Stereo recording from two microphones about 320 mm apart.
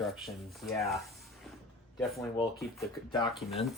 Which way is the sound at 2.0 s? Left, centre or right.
Centre.